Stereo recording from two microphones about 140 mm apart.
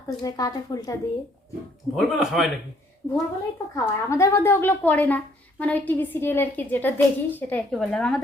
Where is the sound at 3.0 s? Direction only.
20° left (ahead or behind).